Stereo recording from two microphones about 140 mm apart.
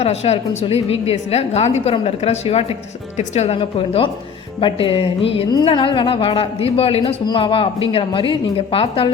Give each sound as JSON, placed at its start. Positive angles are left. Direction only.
{"t": 0.0, "sound": "a woman's voice", "side_deg": 50}